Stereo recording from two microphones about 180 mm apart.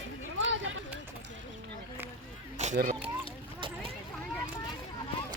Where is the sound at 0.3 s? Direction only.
90° right.